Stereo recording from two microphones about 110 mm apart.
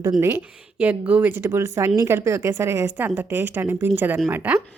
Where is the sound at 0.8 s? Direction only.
10° right (ahead or behind).